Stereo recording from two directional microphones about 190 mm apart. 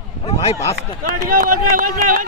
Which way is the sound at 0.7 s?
50° right (ahead or behind).